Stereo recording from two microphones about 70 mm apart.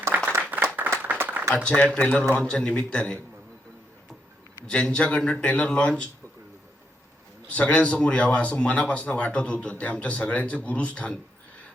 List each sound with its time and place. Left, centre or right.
0.1 s clapping: right
1.2 s a sound: right
1.5 s speech: centre
4.6 s speech: centre
7.4 s speech: centre